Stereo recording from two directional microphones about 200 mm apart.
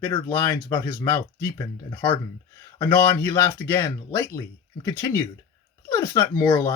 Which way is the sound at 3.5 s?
10° left (ahead or behind).